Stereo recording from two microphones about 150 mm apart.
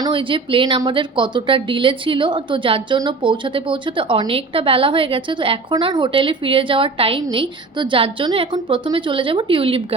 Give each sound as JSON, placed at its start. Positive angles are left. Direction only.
{"t": 0.0, "sound": "a woman's voice", "side_deg": -35}